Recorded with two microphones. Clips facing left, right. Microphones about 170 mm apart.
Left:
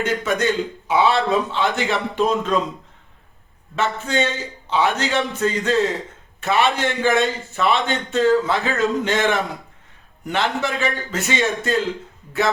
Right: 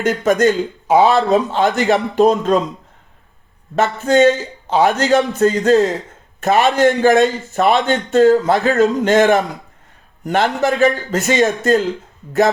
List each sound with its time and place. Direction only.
0.0 s a man's voice: 45° right (ahead or behind)
3.8 s a man's voice: 45° right (ahead or behind)